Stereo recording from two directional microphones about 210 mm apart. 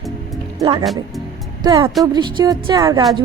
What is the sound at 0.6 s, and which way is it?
A woman's voice, 20° right (ahead or behind).